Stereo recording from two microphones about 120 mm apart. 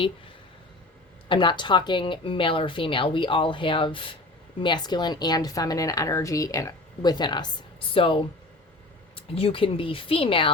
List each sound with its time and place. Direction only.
1.3 s speech: 40° left (ahead or behind)